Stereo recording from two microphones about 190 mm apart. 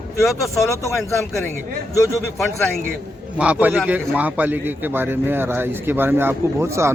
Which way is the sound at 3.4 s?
5° right (ahead or behind).